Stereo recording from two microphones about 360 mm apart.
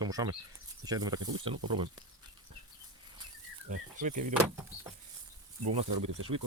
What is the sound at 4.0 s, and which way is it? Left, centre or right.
Speech, right.